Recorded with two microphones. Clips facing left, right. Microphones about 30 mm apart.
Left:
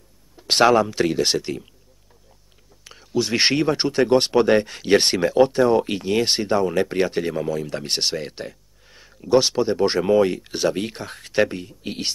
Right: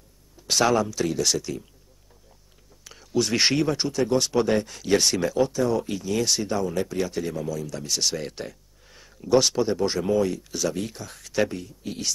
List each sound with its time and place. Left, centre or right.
0.4 s speech: left
2.8 s speech: centre
3.7 s speech: left
8.2 s speech: centre
9.8 s speech: left